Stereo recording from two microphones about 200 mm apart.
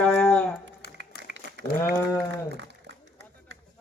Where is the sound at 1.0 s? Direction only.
60° right (ahead or behind).